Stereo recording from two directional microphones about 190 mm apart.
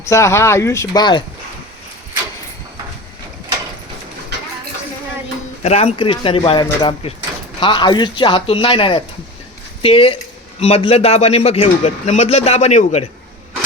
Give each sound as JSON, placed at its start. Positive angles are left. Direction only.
{"t": 0.0, "sound": "speech", "side_deg": 15}
{"t": 5.6, "sound": "a man's voice", "side_deg": 35}